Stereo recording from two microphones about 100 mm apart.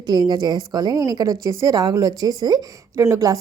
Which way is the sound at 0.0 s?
45° right (ahead or behind).